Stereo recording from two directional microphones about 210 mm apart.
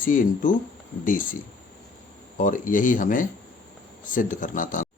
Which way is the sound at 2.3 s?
40° left (ahead or behind).